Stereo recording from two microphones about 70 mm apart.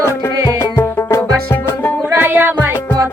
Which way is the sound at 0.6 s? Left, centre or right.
Left.